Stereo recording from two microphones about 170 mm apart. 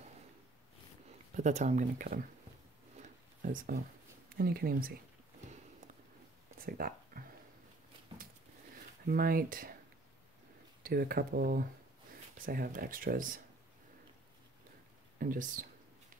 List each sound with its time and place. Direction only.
1.3 s speech: 45° right (ahead or behind)
3.0 s a sound: 50° right (ahead or behind)
4.3 s speech: 60° right (ahead or behind)
6.6 s a sound: 60° right (ahead or behind)
9.1 s speech: 60° right (ahead or behind)
10.8 s speech: 60° right (ahead or behind)
15.1 s speech: 50° right (ahead or behind)